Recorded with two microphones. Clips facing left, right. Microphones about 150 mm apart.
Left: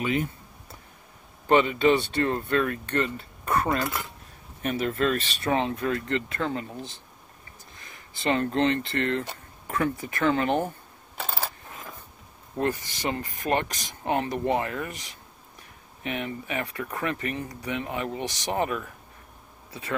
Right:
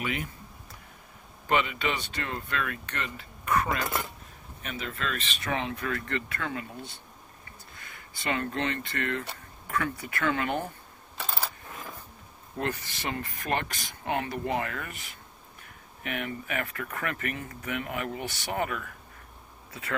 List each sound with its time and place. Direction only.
0.0 s a sound: 25° left (ahead or behind)
1.5 s speech: 35° left (ahead or behind)
4.6 s speech: 45° left (ahead or behind); by 6.9 s 25° left (ahead or behind)
8.2 s speech: 30° left (ahead or behind)
12.5 s speech: 25° left (ahead or behind)
13.4 s speech: 40° left (ahead or behind); by 14.9 s 25° left (ahead or behind)
16.0 s speech: 25° left (ahead or behind)